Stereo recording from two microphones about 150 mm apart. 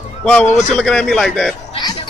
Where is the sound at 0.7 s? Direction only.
5° left (ahead or behind).